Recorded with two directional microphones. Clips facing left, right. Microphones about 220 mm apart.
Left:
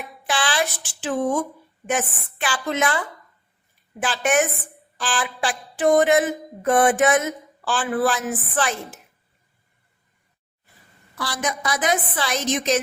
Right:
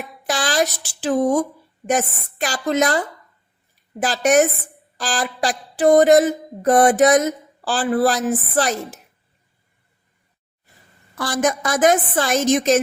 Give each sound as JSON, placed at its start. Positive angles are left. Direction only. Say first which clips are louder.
{"t": 0.3, "sound": "speech", "louder": "right 3 dB", "side_deg": -40}
{"t": 1.9, "sound": "mantra", "louder": "right 4 dB", "side_deg": -40}
{"t": 11.2, "sound": "a woman's voice", "louder": "right 7 dB", "side_deg": -45}